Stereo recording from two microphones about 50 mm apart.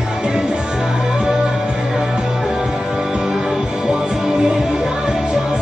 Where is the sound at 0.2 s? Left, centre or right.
Centre.